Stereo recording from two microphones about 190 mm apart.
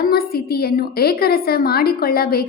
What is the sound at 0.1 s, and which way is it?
A woman's voice, 55° left (ahead or behind).